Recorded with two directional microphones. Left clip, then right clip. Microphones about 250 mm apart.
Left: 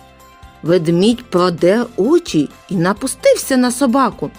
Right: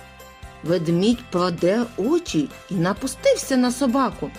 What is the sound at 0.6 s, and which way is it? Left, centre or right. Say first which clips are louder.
Speech: left 7 dB; left.